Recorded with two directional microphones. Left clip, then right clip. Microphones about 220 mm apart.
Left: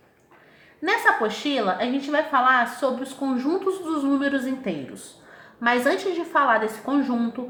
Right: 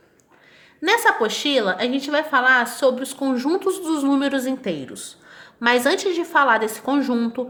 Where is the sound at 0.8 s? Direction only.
45° right (ahead or behind).